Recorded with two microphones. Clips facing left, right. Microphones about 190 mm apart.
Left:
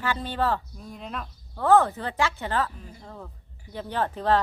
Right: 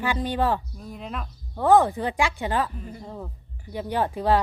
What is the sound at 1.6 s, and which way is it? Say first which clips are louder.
Speech: right 2 dB; 15° right (ahead or behind).